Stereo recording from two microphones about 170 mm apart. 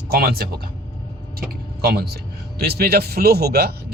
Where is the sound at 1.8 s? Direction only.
70° right (ahead or behind).